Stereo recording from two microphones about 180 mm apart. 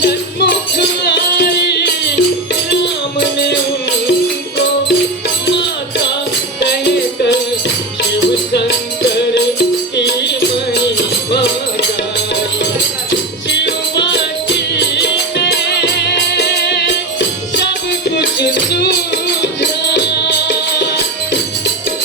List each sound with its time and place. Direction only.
0.0 s music: 65° left (ahead or behind)
6.6 s music: 70° left (ahead or behind)
13.7 s music: 70° left (ahead or behind)
18.7 s music: 65° left (ahead or behind)